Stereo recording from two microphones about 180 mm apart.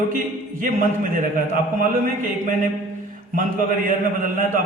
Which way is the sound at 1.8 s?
50° right (ahead or behind).